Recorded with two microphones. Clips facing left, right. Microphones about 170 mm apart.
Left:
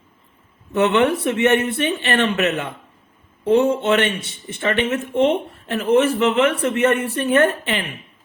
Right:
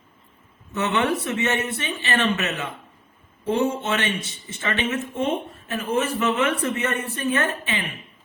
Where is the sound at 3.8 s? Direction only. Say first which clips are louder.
Left 7 dB; 60° left (ahead or behind).